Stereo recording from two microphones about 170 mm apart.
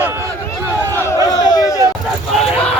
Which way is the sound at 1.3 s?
25° left (ahead or behind).